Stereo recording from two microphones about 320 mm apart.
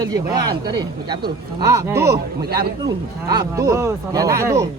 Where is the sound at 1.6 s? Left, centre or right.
Centre.